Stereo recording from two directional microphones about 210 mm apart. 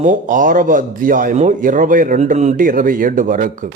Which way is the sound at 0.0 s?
35° right (ahead or behind).